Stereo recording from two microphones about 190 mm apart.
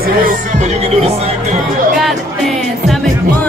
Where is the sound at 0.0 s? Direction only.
45° right (ahead or behind).